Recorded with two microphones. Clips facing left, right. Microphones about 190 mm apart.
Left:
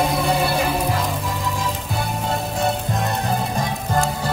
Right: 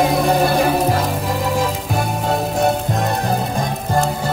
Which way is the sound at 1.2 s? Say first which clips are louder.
Right 6 dB; 65° right (ahead or behind).